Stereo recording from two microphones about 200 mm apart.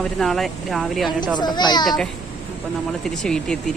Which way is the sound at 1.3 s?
20° left (ahead or behind).